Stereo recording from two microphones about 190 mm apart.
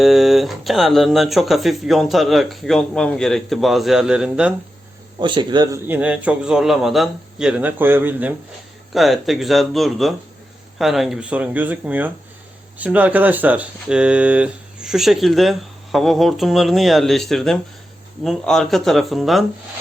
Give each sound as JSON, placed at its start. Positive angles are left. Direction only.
{"t": 0.0, "sound": "speech", "side_deg": 0}
{"t": 5.2, "sound": "a man's voice", "side_deg": -25}
{"t": 5.8, "sound": "a man's voice", "side_deg": -10}